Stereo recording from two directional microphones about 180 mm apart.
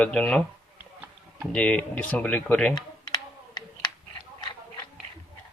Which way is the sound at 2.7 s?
25° left (ahead or behind).